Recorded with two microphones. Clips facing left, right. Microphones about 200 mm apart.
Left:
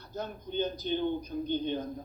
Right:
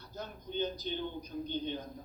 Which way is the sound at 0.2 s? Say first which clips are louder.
Left 4 dB; 55° left (ahead or behind).